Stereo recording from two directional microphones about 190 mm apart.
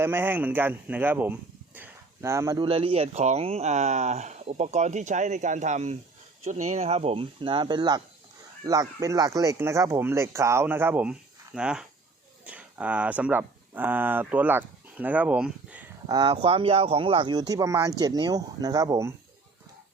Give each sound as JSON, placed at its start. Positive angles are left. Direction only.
{"t": 0.0, "sound": "speech", "side_deg": -10}
{"t": 2.6, "sound": "speech", "side_deg": -30}
{"t": 16.0, "sound": "speech", "side_deg": -20}